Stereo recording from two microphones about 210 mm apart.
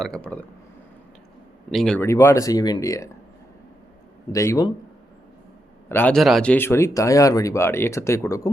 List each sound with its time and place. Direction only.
0.0 s speech: 5° left (ahead or behind)
1.7 s speech: 5° left (ahead or behind)
4.3 s speech: 15° left (ahead or behind)
5.9 s speech: 10° left (ahead or behind)